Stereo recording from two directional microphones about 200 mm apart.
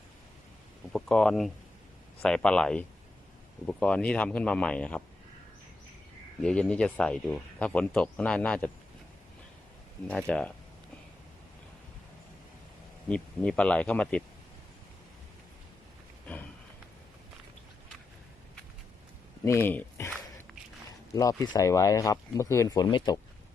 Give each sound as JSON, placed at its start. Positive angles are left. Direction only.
{"t": 0.9, "sound": "speech", "side_deg": 5}
{"t": 6.4, "sound": "speech", "side_deg": 5}
{"t": 10.1, "sound": "speech", "side_deg": 5}
{"t": 13.1, "sound": "speech", "side_deg": 5}
{"t": 19.5, "sound": "speech", "side_deg": 10}
{"t": 21.4, "sound": "speech", "side_deg": 20}